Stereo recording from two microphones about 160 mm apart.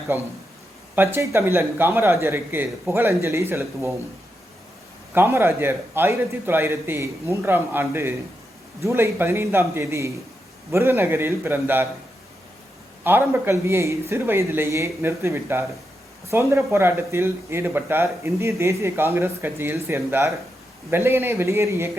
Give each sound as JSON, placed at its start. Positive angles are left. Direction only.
{"t": 0.1, "sound": "speech", "side_deg": -10}
{"t": 5.1, "sound": "speech", "side_deg": -15}
{"t": 13.1, "sound": "speech", "side_deg": -10}